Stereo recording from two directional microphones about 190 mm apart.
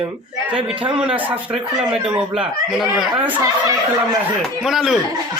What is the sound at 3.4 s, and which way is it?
Speech, 20° right (ahead or behind).